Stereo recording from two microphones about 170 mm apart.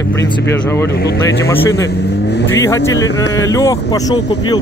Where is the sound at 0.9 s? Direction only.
70° left (ahead or behind).